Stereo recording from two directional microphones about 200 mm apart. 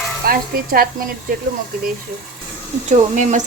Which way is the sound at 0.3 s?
50° right (ahead or behind).